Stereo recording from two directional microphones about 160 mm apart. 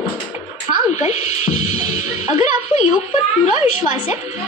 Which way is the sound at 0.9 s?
45° left (ahead or behind).